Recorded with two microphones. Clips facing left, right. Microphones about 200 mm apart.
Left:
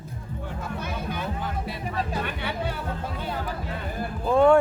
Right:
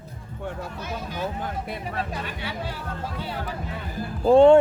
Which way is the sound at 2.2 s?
60° left (ahead or behind).